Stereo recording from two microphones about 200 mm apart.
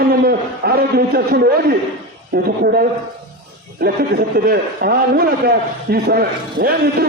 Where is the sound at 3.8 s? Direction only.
50° right (ahead or behind).